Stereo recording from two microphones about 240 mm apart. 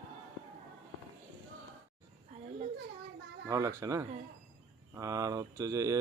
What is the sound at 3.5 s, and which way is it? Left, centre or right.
Speech, centre.